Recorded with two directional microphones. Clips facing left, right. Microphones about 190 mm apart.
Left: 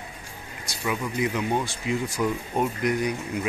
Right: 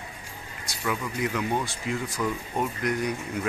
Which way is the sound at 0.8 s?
15° left (ahead or behind).